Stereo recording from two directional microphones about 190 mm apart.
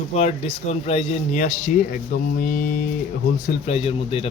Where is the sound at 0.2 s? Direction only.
35° left (ahead or behind).